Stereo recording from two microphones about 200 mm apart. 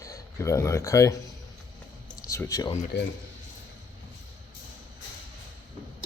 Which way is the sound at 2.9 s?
55° left (ahead or behind).